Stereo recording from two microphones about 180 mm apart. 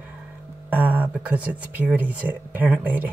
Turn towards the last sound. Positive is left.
turn(degrees=-10)  # may be behind; listen again after turning